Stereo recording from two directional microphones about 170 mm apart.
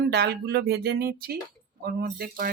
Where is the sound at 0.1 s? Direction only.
70° right (ahead or behind).